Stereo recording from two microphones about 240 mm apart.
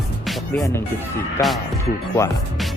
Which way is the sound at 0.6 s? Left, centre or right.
Centre.